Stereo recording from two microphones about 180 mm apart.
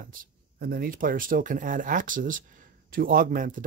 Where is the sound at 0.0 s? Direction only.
50° right (ahead or behind).